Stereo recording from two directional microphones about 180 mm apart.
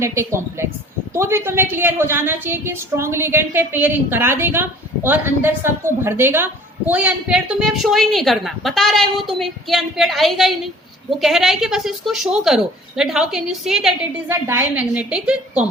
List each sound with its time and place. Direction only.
0.0 s a woman's voice: 15° right (ahead or behind)
14.3 s a woman's voice: 15° right (ahead or behind)